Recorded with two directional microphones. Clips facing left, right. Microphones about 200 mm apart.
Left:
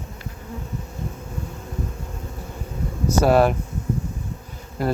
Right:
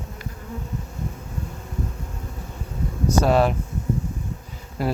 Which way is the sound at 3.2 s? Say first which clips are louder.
Left 2 dB; 5° left (ahead or behind).